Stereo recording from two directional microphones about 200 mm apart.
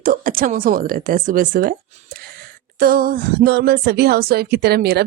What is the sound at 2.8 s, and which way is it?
Speech, 45° right (ahead or behind).